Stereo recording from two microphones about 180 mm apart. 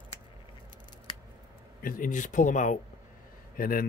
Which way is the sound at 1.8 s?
50° left (ahead or behind).